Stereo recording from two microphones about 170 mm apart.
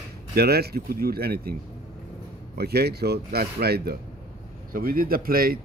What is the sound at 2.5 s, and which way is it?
Speech, 70° right (ahead or behind).